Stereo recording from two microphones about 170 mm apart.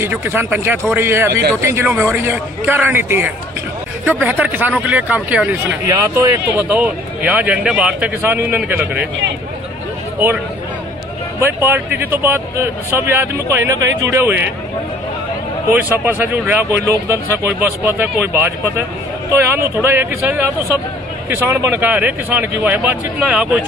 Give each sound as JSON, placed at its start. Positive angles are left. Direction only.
{"t": 0.0, "sound": "speech", "side_deg": -15}
{"t": 11.3, "sound": "speech", "side_deg": -15}
{"t": 15.7, "sound": "speech", "side_deg": -10}